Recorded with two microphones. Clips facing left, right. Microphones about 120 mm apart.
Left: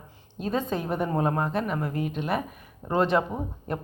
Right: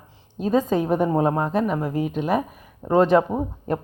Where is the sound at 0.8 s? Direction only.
15° right (ahead or behind).